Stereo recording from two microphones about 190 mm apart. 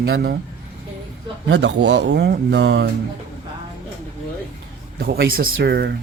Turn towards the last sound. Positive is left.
turn(degrees=-60)  # may be behind; listen again after turning